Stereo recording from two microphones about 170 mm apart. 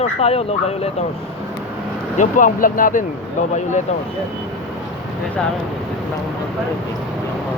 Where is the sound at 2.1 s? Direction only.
50° left (ahead or behind).